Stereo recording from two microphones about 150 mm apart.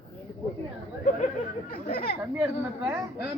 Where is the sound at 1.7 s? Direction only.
85° left.